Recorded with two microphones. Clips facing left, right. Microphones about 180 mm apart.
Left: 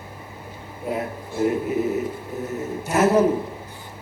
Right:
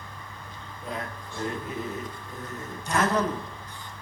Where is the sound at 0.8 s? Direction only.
10° left (ahead or behind).